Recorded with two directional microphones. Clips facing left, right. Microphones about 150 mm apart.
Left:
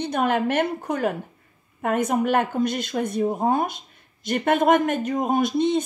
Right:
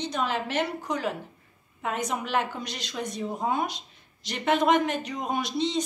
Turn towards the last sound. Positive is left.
turn(degrees=55)  # may be behind; listen again after turning